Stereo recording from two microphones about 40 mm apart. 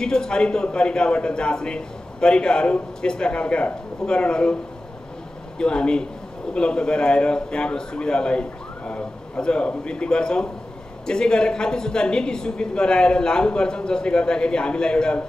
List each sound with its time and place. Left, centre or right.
0.0 s a man's voice: centre
5.6 s a man's voice: left